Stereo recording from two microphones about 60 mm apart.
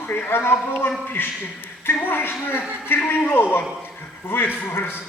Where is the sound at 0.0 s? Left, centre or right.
Left.